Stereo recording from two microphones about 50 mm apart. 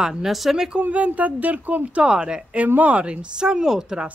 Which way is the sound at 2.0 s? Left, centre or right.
Centre.